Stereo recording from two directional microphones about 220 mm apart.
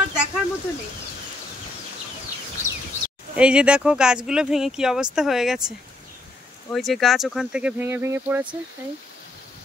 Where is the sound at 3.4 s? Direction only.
5° right (ahead or behind).